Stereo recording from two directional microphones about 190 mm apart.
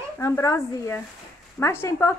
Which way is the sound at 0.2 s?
15° left (ahead or behind).